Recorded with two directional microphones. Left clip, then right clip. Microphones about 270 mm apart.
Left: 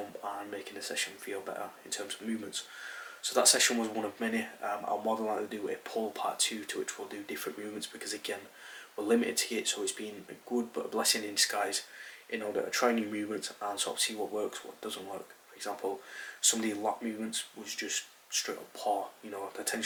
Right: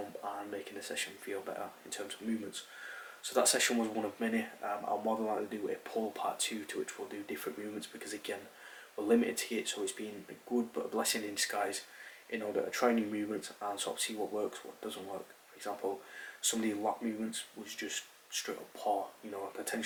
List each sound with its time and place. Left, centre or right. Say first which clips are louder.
0.2 s speech: left 2 dB; centre
10.5 s speech: left 1 dB; right
10.9 s speech: left 6 dB; centre
14.2 s speech: left 2 dB; right
15.7 s speech: left 2 dB; centre
16.4 s speech: left 3 dB; centre
18.9 s speech: left 2 dB; centre